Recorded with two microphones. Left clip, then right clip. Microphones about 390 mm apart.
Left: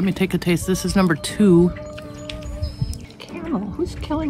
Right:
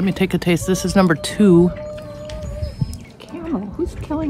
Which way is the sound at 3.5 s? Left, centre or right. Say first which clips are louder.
Right 1 dB; left.